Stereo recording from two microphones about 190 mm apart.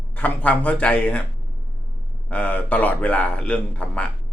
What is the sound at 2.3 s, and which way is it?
A man's voice, 10° left (ahead or behind).